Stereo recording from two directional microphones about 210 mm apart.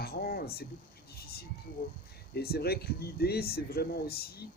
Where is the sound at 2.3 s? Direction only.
50° left (ahead or behind).